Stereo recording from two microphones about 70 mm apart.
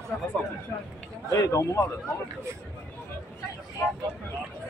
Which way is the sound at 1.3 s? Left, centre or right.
Left.